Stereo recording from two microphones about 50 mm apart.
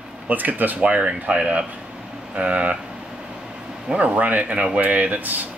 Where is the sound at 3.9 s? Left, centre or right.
Right.